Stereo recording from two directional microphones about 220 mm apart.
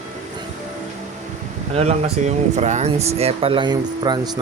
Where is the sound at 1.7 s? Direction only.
30° right (ahead or behind).